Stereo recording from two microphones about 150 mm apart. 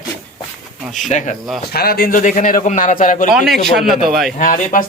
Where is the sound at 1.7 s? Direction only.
90° left; by 3.3 s 60° left (ahead or behind).